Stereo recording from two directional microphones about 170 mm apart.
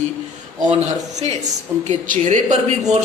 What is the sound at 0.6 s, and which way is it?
A man's voice, 40° right (ahead or behind).